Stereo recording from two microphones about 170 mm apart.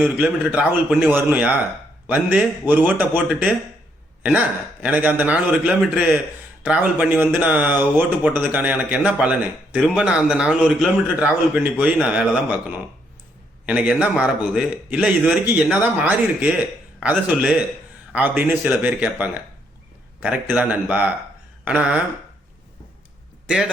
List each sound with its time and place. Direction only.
0.0 s speech: 5° right (ahead or behind)
4.8 s a man's voice: 10° right (ahead or behind)
23.5 s a man's voice: 5° right (ahead or behind)